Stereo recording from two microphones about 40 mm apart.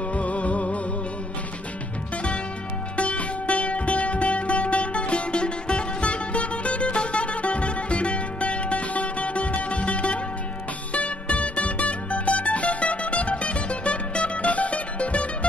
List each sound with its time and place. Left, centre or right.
0.1 s music: left
3.0 s music: left